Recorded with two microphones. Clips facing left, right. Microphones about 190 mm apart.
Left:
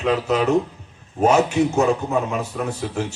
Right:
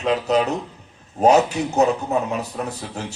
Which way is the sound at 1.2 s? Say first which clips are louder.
Right 1 dB; 40° right (ahead or behind).